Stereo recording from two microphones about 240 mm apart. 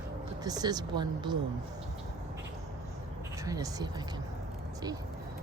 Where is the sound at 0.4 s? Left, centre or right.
Centre.